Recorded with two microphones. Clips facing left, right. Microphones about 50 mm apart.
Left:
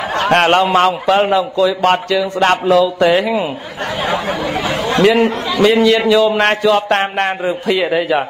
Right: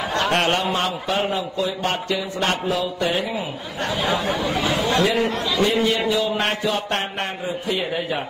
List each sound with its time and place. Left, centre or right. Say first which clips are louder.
0.3 s a man's voice: left 12 dB; left
1.3 s a sound: left 10 dB; left
4.5 s speech: left 3 dB; left
5.6 s a man's voice: left 9 dB; left